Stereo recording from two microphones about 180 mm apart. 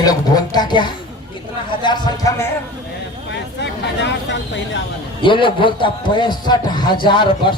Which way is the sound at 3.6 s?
80° left.